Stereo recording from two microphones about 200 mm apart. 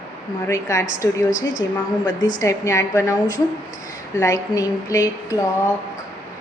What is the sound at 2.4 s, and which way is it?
A woman's voice, 15° left (ahead or behind).